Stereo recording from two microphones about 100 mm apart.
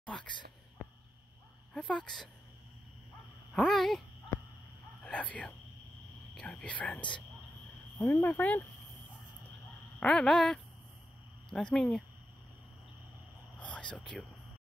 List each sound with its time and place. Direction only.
0.0 s a sound: 10° left (ahead or behind)
1.7 s speech: 5° left (ahead or behind)
3.5 s speech: 5° left (ahead or behind)
5.0 s speech: 10° left (ahead or behind)
9.9 s speech: 10° left (ahead or behind)
13.6 s speech: 10° left (ahead or behind)